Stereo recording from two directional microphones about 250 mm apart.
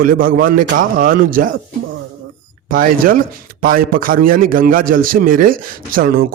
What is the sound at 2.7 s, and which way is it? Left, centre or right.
A man's voice, right.